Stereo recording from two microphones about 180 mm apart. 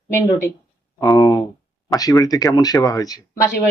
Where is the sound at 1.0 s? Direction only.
20° left (ahead or behind).